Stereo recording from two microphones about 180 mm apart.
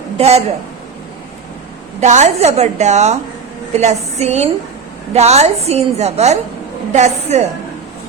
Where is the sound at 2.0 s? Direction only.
40° right (ahead or behind).